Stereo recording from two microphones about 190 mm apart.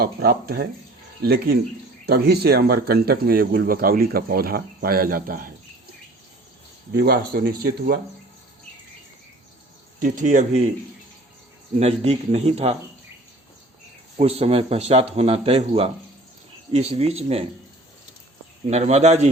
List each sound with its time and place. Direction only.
0.0 s speech: 55° right (ahead or behind)
6.9 s speech: 55° right (ahead or behind)
10.0 s speech: 45° right (ahead or behind)
11.8 s speech: 35° right (ahead or behind)
14.2 s speech: 35° right (ahead or behind)
18.7 s speech: 35° right (ahead or behind)